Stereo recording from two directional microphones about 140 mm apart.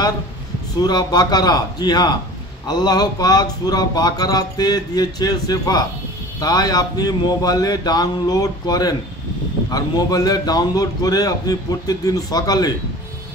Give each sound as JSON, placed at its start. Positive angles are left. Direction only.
{"t": 0.7, "sound": "speech", "side_deg": 30}